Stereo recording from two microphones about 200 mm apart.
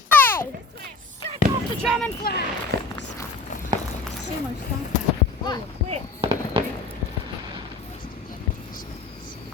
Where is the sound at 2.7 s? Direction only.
55° right (ahead or behind).